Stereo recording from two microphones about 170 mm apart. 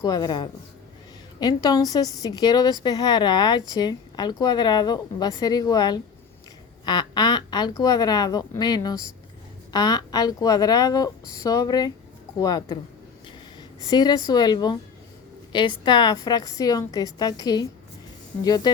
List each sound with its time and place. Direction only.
0.0 s speech: 25° left (ahead or behind)
13.8 s speech: 25° left (ahead or behind)